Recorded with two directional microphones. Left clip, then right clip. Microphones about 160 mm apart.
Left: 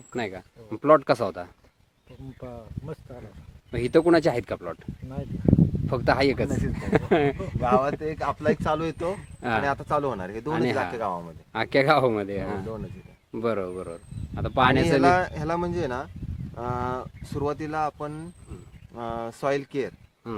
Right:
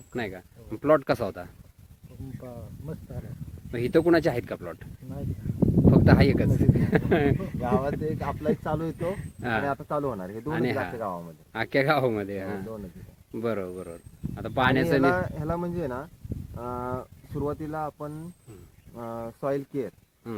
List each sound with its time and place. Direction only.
0.1 s speech: 10° left (ahead or behind)
2.4 s speech: 25° left (ahead or behind)
3.7 s speech: 10° left (ahead or behind)
5.9 s speech: 10° left (ahead or behind)
7.7 s speech: centre (ahead or behind)
15.0 s speech: 35° left (ahead or behind)
19.5 s speech: 35° left (ahead or behind)